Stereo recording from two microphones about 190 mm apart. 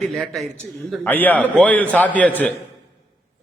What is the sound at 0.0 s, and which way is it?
A man's voice, centre (ahead or behind).